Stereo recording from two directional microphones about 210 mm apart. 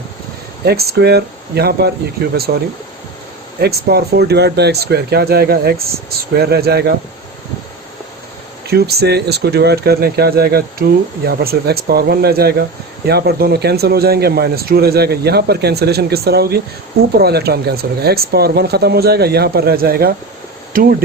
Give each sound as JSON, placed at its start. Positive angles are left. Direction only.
{"t": 0.6, "sound": "speech", "side_deg": -50}
{"t": 3.6, "sound": "speech", "side_deg": -50}
{"t": 8.6, "sound": "speech", "side_deg": -50}